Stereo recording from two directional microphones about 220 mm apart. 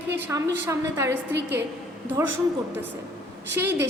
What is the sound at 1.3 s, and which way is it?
Speech, 50° right (ahead or behind).